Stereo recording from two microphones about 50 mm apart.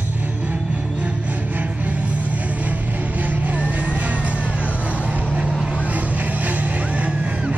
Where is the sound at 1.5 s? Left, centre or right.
Right.